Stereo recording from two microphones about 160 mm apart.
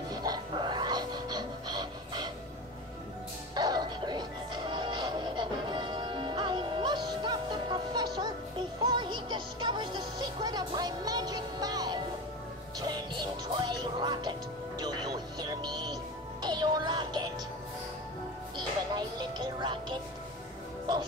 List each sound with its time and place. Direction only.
0.1 s music: 25° right (ahead or behind)
3.5 s music: 25° right (ahead or behind)
18.6 s music: 25° right (ahead or behind)